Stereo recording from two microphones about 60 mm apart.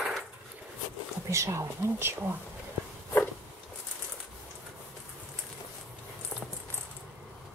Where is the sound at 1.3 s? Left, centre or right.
Right.